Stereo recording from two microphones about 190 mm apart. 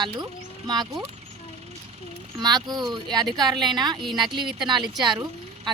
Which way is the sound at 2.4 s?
20° right (ahead or behind).